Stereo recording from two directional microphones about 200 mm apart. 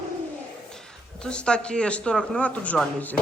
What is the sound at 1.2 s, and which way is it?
A man's voice, 5° left (ahead or behind).